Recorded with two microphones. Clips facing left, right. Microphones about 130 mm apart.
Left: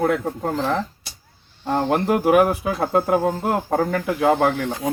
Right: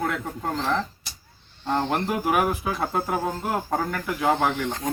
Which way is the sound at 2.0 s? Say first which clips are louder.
Left 7 dB; 55° left (ahead or behind).